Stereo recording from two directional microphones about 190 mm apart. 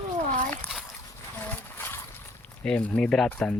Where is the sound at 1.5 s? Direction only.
10° left (ahead or behind).